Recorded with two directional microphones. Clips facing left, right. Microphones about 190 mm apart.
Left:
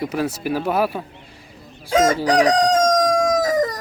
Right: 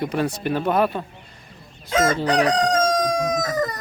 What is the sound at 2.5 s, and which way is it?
Crowing, 40° left (ahead or behind).